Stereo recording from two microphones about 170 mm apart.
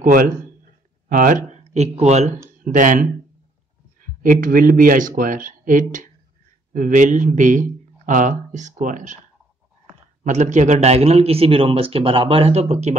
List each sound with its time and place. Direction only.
1.0 s speech: 50° right (ahead or behind)
10.2 s a man's voice: 45° right (ahead or behind)